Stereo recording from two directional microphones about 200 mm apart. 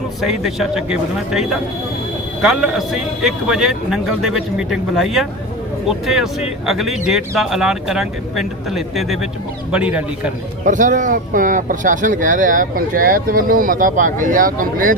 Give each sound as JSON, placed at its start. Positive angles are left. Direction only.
{"t": 0.2, "sound": "speech", "side_deg": 0}
{"t": 10.7, "sound": "speech", "side_deg": -40}